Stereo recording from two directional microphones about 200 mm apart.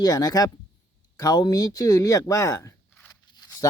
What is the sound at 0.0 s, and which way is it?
Speech, 20° left (ahead or behind).